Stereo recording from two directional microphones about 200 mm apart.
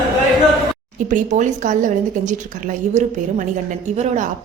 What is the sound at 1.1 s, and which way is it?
A woman's voice, 35° right (ahead or behind).